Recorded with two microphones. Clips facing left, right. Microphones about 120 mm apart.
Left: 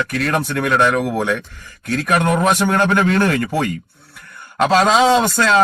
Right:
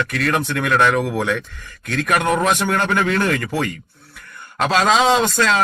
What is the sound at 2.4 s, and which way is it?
Speech, 40° left (ahead or behind).